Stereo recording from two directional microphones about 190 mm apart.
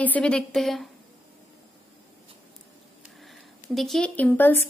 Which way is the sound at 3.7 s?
Centre (ahead or behind).